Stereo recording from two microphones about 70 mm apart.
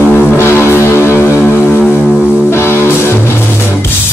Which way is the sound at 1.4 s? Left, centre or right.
Left.